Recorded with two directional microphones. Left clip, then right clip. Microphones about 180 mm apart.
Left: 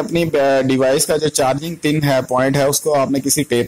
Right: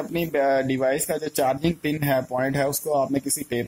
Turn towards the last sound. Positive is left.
turn(degrees=10)  # may be behind; listen again after turning